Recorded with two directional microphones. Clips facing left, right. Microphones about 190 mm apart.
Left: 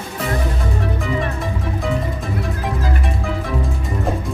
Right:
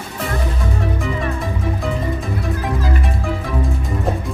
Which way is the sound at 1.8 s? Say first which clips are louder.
Even; centre (ahead or behind).